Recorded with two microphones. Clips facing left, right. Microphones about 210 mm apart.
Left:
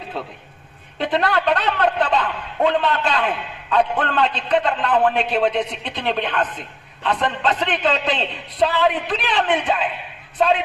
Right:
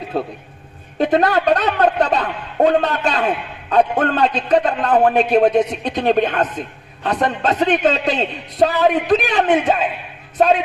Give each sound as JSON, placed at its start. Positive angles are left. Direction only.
{"t": 0.9, "sound": "a woman's voice", "side_deg": -45}